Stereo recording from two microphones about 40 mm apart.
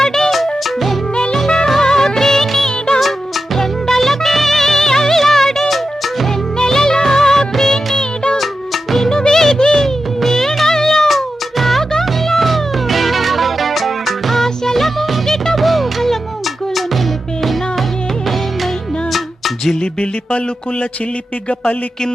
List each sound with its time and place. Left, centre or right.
0.0 s music: centre
1.7 s music of bollywood: centre
2.6 s music of bollywood: centre
3.0 s music: centre
6.6 s music of bollywood: centre
7.9 s music of bollywood: left
8.4 s music: centre
9.0 s music: centre
17.4 s music: centre
19.8 s music: left